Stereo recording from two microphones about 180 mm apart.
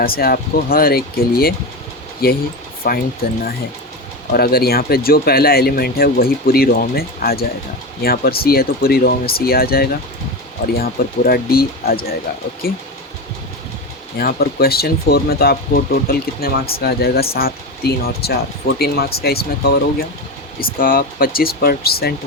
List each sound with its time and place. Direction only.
0.0 s speech: 55° left (ahead or behind)
4.3 s speech: 60° left (ahead or behind)
14.2 s speech: 55° left (ahead or behind)